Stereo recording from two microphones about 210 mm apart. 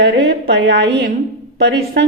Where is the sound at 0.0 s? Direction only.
55° right (ahead or behind).